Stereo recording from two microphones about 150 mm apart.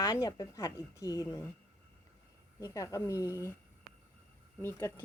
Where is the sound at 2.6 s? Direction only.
20° left (ahead or behind).